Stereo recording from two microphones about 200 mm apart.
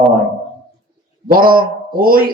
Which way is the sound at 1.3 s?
45° right (ahead or behind).